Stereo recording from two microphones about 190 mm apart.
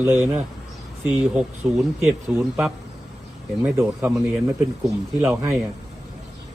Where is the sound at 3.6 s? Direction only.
15° right (ahead or behind).